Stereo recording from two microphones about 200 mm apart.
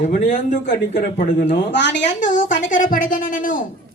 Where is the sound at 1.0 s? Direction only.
50° left (ahead or behind).